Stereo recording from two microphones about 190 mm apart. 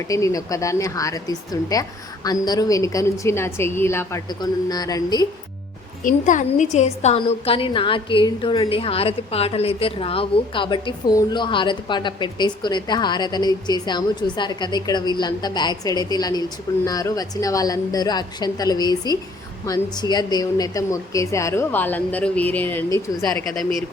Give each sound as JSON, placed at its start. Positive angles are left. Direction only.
{"t": 0.1, "sound": "speech", "side_deg": 15}
{"t": 6.0, "sound": "a woman's voice", "side_deg": 45}